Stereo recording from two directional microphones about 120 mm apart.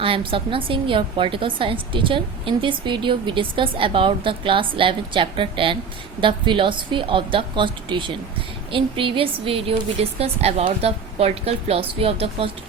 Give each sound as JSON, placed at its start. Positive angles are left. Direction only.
{"t": 0.0, "sound": "a woman's voice", "side_deg": -45}